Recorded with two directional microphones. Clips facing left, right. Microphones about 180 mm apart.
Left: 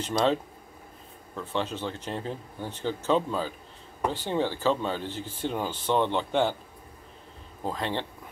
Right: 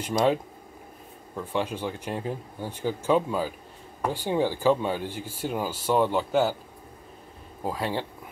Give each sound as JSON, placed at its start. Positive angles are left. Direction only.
{"t": 0.0, "sound": "speech", "side_deg": -10}
{"t": 7.6, "sound": "speech", "side_deg": -10}